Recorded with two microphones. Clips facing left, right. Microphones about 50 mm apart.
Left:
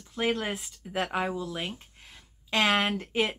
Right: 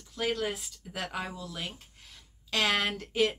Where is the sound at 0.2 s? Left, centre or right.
Left.